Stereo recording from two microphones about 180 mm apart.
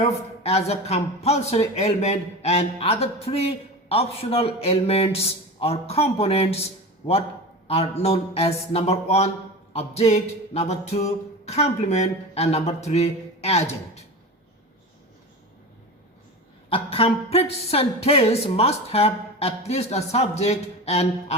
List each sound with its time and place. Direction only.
0.0 s speech: 35° left (ahead or behind)
8.0 s speech: 35° left (ahead or behind)
16.6 s speech: 30° left (ahead or behind)